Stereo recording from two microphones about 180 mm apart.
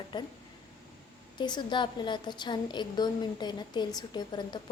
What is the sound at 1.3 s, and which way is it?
A woman's voice, 25° left (ahead or behind).